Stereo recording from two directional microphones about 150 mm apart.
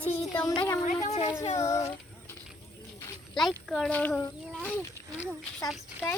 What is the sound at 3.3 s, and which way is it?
Speech, centre (ahead or behind).